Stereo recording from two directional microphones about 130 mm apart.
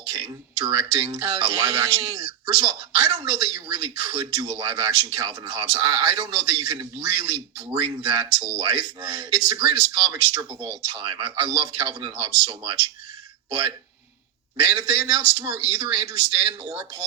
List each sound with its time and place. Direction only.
0.0 s speech: 40° right (ahead or behind)